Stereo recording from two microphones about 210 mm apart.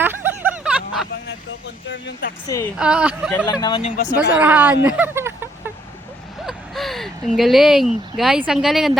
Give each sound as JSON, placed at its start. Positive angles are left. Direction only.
{"t": 0.0, "sound": "a sound", "side_deg": -10}
{"t": 1.6, "sound": "speech", "side_deg": 55}
{"t": 2.7, "sound": "speech", "side_deg": -5}
{"t": 3.4, "sound": "speech", "side_deg": 20}
{"t": 4.4, "sound": "speech", "side_deg": -5}
{"t": 6.4, "sound": "speech", "side_deg": 0}